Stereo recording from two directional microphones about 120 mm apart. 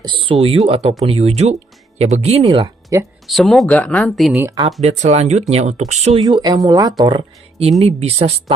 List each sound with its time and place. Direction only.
0.0 s speech: 45° right (ahead or behind); by 2.4 s 65° right (ahead or behind)
2.9 s speech: 25° right (ahead or behind)
3.3 s speech: centre (ahead or behind)
4.1 s speech: centre (ahead or behind)
4.8 s speech: 70° right (ahead or behind)
6.2 s speech: 35° right (ahead or behind); by 8.5 s 60° right (ahead or behind)